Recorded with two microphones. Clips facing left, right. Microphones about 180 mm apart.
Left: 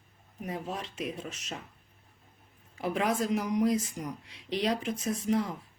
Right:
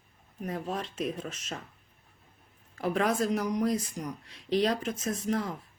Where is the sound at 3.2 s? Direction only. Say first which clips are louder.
Even; 40° right (ahead or behind).